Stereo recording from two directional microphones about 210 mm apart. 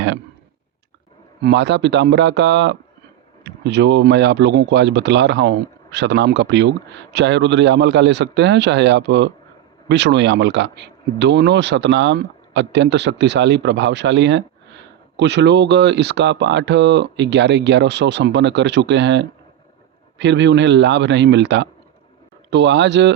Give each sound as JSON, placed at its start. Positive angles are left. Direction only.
{"t": 1.4, "sound": "speech", "side_deg": -55}